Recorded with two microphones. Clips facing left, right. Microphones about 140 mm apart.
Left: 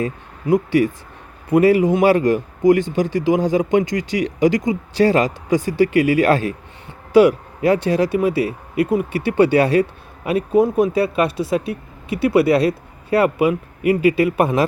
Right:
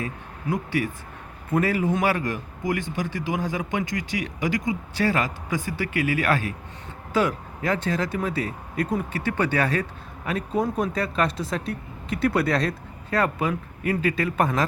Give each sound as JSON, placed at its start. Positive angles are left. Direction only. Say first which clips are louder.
{"t": 1.5, "sound": "speech", "louder": "left 9 dB", "side_deg": 20}
{"t": 2.0, "sound": "speech", "louder": "left 10 dB", "side_deg": 25}
{"t": 7.1, "sound": "a man's voice", "louder": "left 11 dB", "side_deg": 15}